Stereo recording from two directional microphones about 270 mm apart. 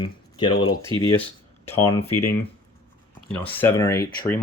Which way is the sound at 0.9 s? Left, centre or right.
Centre.